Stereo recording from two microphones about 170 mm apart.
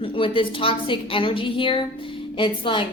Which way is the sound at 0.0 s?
30° left (ahead or behind).